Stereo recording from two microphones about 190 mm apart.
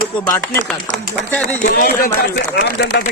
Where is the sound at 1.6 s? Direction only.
50° left (ahead or behind).